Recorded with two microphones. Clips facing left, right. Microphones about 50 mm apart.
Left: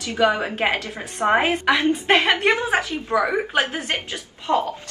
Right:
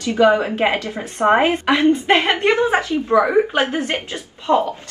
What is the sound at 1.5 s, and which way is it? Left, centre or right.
A woman's voice, right.